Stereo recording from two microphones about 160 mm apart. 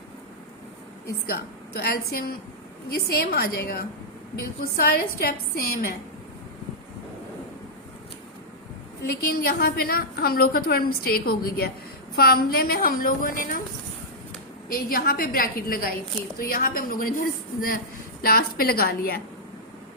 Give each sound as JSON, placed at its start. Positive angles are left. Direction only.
{"t": 1.3, "sound": "a woman's voice", "side_deg": 75}
{"t": 9.0, "sound": "a woman's voice", "side_deg": 75}
{"t": 14.7, "sound": "a woman's voice", "side_deg": 65}